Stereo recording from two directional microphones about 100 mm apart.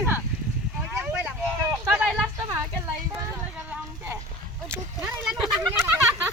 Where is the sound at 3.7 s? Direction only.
20° right (ahead or behind).